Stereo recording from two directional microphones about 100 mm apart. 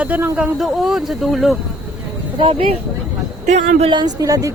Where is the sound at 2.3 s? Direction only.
60° right (ahead or behind).